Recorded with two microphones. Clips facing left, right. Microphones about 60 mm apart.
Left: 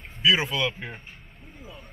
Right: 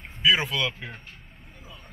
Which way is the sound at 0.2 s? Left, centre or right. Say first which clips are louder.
Even; centre.